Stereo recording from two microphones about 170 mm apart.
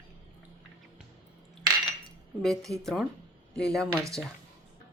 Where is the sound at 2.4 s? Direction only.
Centre (ahead or behind).